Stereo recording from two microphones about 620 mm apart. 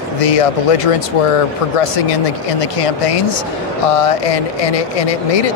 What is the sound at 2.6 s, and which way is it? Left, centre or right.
Speech, left.